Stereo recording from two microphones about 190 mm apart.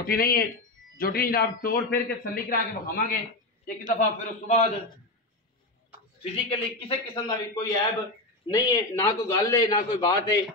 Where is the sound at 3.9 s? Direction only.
40° left (ahead or behind).